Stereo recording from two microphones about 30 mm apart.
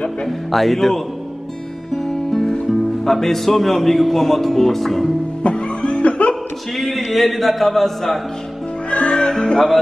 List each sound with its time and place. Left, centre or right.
0.5 s a sound: centre
2.0 s speech: centre
5.4 s music: left
7.1 s a sound: centre
8.9 s music: left
9.3 s music: left